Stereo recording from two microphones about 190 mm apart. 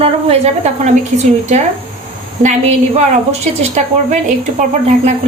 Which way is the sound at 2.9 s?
35° right (ahead or behind).